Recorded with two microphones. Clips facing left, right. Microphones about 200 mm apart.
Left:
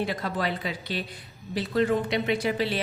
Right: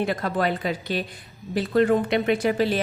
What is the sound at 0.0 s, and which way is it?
A woman's voice, 50° right (ahead or behind).